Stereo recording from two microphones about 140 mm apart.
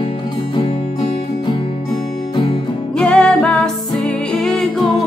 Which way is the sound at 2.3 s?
35° left (ahead or behind).